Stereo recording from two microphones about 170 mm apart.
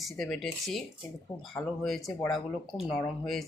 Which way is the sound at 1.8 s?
Centre (ahead or behind).